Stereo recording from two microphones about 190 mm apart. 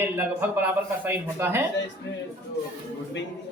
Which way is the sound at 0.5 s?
10° right (ahead or behind).